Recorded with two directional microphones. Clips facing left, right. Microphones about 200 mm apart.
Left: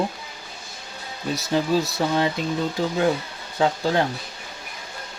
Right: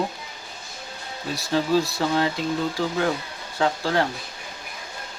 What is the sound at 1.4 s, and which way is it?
Speech, 20° left (ahead or behind).